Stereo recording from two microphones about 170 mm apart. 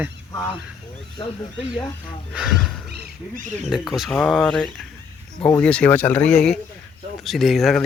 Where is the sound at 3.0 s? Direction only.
50° right (ahead or behind).